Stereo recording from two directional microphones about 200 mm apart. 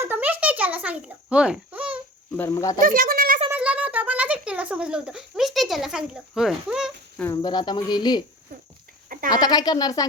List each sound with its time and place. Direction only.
0.0 s babbling: 10° right (ahead or behind)
2.3 s speech: 10° left (ahead or behind)
2.8 s a sound: 45° right (ahead or behind)
3.5 s a sound: 5° right (ahead or behind)
7.2 s speech: 20° left (ahead or behind)
9.3 s speech: 20° left (ahead or behind)